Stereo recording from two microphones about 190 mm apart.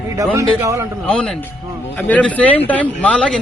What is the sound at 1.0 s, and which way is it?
A man's voice, 5° left (ahead or behind).